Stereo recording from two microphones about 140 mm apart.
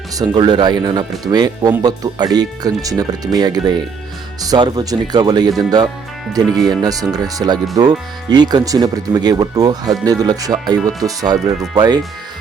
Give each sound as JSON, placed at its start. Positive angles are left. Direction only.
{"t": 0.2, "sound": "speech", "side_deg": -30}